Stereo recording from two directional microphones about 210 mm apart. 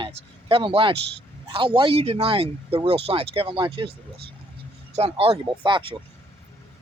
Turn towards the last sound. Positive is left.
turn(degrees=-25)  # may be behind; listen again after turning